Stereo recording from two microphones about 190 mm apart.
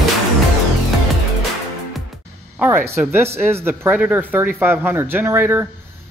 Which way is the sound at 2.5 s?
10° right (ahead or behind).